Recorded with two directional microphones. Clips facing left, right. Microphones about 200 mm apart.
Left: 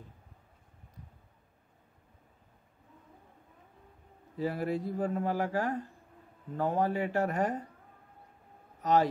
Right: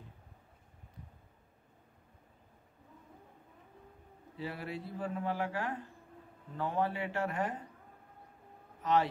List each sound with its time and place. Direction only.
4.4 s a man's voice: 40° left (ahead or behind)
8.8 s a man's voice: 40° left (ahead or behind)